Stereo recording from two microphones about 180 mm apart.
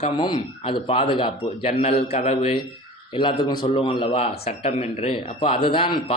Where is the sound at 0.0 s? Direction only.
30° left (ahead or behind).